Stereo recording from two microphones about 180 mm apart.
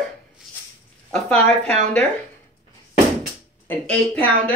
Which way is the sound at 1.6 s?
35° right (ahead or behind).